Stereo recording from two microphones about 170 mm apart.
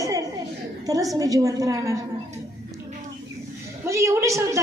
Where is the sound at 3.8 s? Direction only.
15° right (ahead or behind).